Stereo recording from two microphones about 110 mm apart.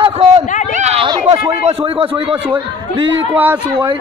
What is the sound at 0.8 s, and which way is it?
Chatter, 85° right.